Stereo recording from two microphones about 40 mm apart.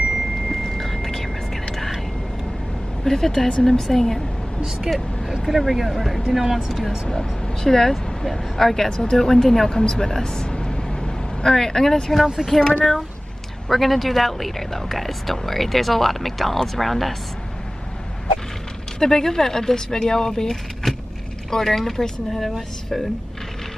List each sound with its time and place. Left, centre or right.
0.5 s a sound: centre
3.0 s speech: centre
7.1 s speech: centre
18.9 s speech: centre
20.8 s vehicle: centre
21.5 s speech: centre